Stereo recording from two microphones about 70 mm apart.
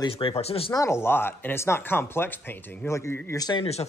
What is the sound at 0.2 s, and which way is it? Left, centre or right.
Speech, left.